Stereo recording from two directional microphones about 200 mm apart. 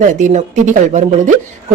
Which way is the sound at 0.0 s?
40° right (ahead or behind).